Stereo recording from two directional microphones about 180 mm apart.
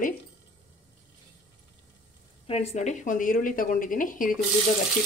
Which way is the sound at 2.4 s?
35° left (ahead or behind).